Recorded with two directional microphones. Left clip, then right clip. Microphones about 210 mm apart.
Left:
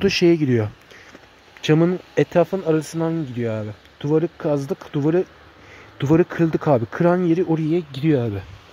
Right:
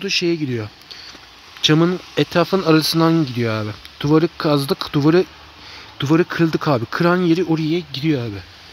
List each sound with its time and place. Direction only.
0.0 s speech: 20° left (ahead or behind)
0.4 s speech: 5° left (ahead or behind)
2.4 s speech: 15° right (ahead or behind)
5.9 s speech: 5° right (ahead or behind)
7.7 s speech: 5° left (ahead or behind)